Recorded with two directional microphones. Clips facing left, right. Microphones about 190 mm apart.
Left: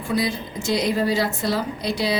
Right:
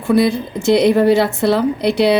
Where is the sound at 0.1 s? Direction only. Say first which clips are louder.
Right 10 dB; 60° right (ahead or behind).